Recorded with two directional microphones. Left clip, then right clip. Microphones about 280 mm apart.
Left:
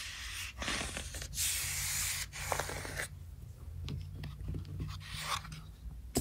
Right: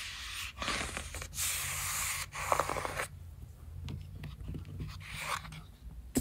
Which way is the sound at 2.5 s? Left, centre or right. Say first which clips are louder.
Right 7 dB; right.